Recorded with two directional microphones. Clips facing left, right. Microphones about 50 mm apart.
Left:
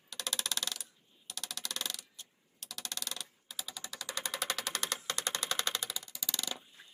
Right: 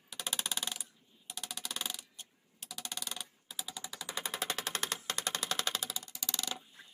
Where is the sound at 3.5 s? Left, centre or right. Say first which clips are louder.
Even; centre.